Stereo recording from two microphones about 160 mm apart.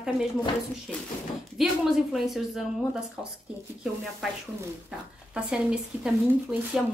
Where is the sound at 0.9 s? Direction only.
Centre (ahead or behind).